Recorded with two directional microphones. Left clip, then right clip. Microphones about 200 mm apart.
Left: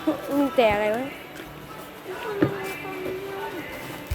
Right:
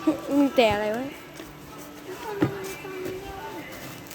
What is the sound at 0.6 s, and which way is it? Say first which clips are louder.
Speech: left 3 dB; 25° right (ahead or behind).